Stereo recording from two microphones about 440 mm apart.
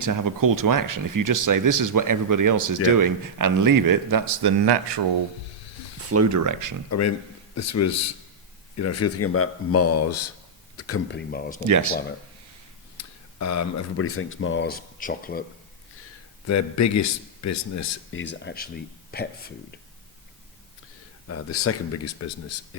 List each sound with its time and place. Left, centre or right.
0.0 s speech: right
6.1 s speech: right
7.5 s speech: left; by 11.6 s centre
11.6 s speech: right
13.0 s speech: left; by 15.4 s centre
16.5 s speech: left
18.2 s speech: left
21.6 s speech: left